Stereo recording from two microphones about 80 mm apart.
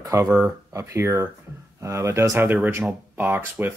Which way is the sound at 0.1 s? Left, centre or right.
Right.